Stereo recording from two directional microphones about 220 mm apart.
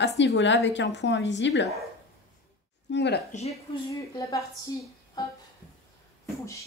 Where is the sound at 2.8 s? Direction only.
50° left (ahead or behind).